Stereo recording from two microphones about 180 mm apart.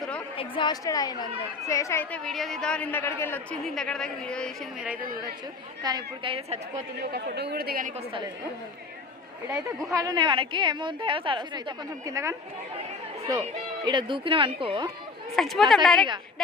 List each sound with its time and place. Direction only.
0.0 s a sound: 5° left (ahead or behind)
0.3 s a woman's voice: 25° left (ahead or behind); by 4.9 s 5° left (ahead or behind)
5.8 s a woman's voice: 20° right (ahead or behind)
7.0 s speech: 60° right (ahead or behind)
9.9 s a woman's voice: 20° right (ahead or behind)
13.8 s a woman's voice: 25° right (ahead or behind)
15.4 s a woman's voice: centre (ahead or behind)